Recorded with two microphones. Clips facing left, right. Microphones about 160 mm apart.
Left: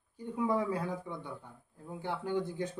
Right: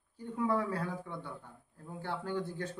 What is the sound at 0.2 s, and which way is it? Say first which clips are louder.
A man's voice: left 1 dB; 15° left (ahead or behind).